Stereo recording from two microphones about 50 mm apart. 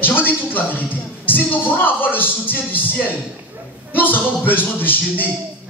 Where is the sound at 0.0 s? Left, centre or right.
Left.